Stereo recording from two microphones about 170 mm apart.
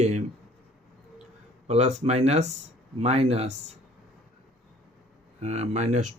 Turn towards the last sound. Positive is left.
turn(degrees=-45)  # may be behind; listen again after turning